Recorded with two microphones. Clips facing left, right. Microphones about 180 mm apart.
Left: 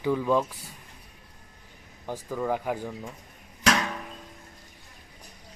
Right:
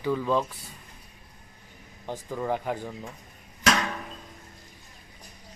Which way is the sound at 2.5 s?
10° left (ahead or behind).